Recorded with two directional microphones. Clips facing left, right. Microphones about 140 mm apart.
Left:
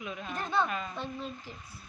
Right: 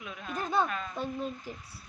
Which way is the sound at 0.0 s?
Centre (ahead or behind).